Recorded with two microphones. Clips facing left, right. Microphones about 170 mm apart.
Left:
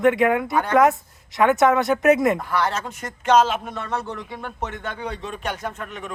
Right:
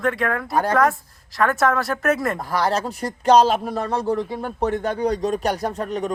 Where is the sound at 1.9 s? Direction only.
10° left (ahead or behind).